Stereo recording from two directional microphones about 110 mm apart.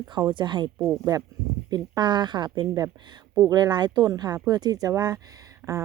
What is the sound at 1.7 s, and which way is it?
Speech, 40° right (ahead or behind).